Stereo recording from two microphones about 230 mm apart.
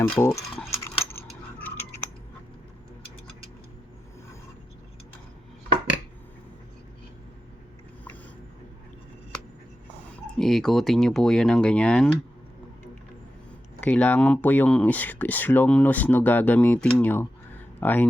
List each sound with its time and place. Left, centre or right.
0.2 s speech: centre
0.7 s keys jangling: centre
1.3 s coin: centre
10.3 s speech: centre
13.8 s speech: centre